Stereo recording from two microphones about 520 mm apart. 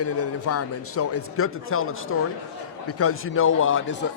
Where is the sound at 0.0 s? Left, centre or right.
Left.